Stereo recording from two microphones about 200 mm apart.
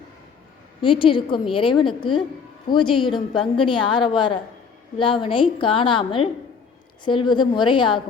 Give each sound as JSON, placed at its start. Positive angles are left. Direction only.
{"t": 0.8, "sound": "a woman's voice", "side_deg": 25}